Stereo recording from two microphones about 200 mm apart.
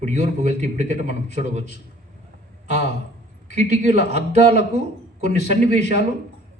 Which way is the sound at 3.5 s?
35° right (ahead or behind).